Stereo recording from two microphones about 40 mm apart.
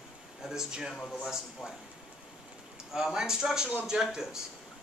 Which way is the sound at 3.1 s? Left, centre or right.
Centre.